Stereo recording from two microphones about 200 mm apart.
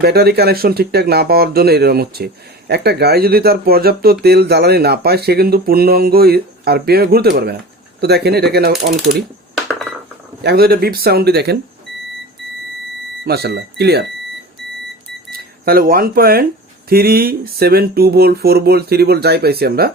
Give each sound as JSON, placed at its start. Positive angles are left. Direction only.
{"t": 0.0, "sound": "speech", "side_deg": -50}
{"t": 9.6, "sound": "a sound", "side_deg": 0}
{"t": 10.4, "sound": "speech", "side_deg": -50}
{"t": 13.2, "sound": "speech", "side_deg": -50}
{"t": 15.0, "sound": "cash register", "side_deg": -50}
{"t": 16.9, "sound": "speech", "side_deg": -50}